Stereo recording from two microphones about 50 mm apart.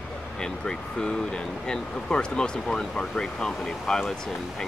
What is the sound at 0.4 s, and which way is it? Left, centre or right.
Speech, centre.